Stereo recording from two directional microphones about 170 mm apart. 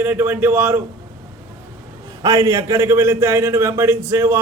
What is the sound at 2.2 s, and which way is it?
A man's voice, 15° right (ahead or behind).